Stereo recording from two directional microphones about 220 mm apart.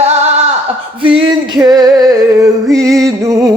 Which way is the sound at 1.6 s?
15° right (ahead or behind).